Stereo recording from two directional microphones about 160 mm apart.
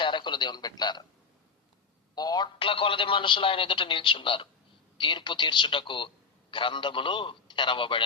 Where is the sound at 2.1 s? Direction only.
25° left (ahead or behind).